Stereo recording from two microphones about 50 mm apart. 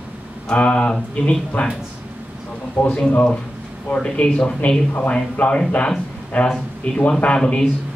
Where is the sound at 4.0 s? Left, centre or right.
Left.